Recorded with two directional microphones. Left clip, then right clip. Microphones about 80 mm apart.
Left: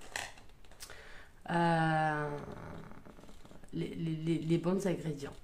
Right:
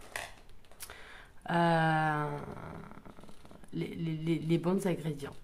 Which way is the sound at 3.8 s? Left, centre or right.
Right.